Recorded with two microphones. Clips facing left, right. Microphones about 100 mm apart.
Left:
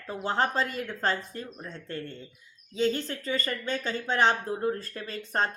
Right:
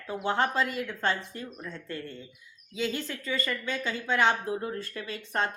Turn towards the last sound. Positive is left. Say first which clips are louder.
# left 1 dB
turn(degrees=35)  # may be behind; listen again after turning